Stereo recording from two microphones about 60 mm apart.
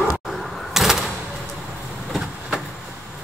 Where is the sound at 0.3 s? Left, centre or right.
Centre.